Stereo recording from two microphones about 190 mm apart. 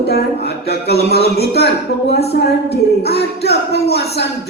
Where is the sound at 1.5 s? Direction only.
60° left (ahead or behind).